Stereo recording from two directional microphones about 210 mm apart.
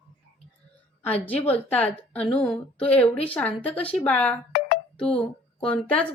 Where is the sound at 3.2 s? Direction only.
5° left (ahead or behind).